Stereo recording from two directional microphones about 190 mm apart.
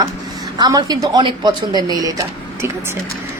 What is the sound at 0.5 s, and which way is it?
A woman's voice, 20° right (ahead or behind).